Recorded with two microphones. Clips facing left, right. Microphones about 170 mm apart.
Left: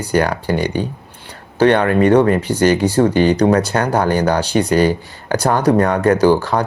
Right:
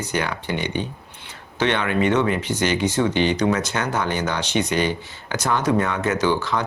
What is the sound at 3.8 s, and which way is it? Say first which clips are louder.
Speech: left 8 dB; 35° left (ahead or behind).